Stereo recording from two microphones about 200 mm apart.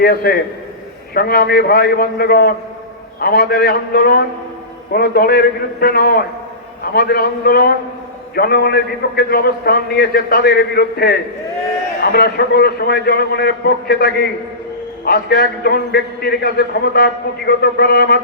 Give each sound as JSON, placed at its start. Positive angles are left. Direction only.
{"t": 0.0, "sound": "a man's voice", "side_deg": 50}